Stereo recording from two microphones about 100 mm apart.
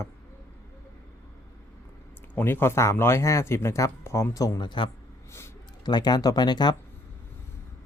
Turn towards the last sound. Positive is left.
turn(degrees=45)  # may be behind; listen again after turning